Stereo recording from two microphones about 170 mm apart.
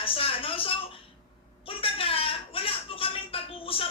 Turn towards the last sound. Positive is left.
turn(degrees=35)  # may be behind; listen again after turning